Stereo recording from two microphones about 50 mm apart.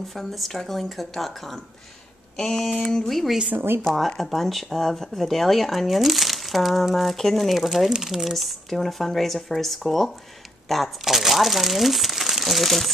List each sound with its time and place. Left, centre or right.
0.1 s speech: centre
2.3 s a sound: centre
2.8 s speech: centre
3.5 s speech: right
3.8 s speech: centre